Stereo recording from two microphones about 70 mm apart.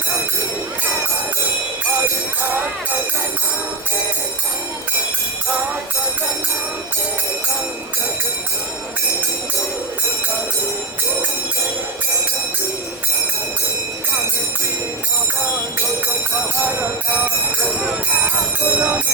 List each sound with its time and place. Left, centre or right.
16.6 s speech: right
17.8 s speech: centre